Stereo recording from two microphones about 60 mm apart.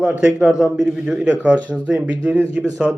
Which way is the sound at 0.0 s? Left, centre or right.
Centre.